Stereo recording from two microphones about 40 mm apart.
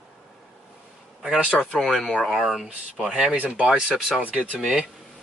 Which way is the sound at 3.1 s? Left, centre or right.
Right.